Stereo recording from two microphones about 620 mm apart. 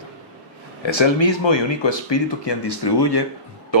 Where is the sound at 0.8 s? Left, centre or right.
Left.